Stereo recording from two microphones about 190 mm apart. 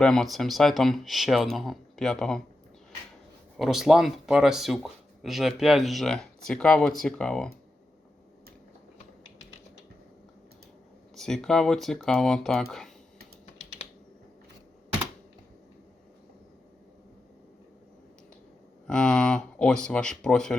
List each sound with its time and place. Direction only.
0.0 s speech: centre (ahead or behind)
3.6 s speech: centre (ahead or behind)
11.1 s speech: centre (ahead or behind)
18.9 s speech: 5° left (ahead or behind)